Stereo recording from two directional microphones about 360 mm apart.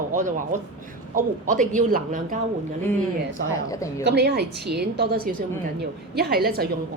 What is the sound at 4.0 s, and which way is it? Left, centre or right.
A woman's voice, right.